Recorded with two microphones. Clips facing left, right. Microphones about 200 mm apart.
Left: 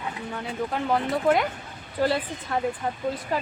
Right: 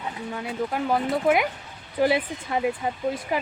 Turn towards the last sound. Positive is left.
turn(degrees=-15)  # may be behind; listen again after turning